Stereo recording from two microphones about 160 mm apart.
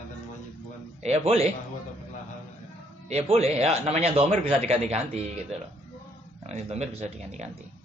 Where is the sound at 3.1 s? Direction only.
40° right (ahead or behind).